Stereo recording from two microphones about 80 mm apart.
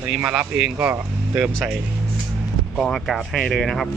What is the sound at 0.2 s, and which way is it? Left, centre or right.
Speech, centre.